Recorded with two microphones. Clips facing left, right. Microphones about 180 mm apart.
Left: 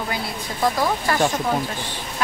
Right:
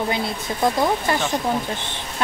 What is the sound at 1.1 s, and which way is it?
Speech, 20° right (ahead or behind).